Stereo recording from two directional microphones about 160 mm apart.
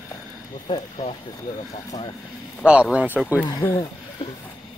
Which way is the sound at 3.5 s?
15° left (ahead or behind).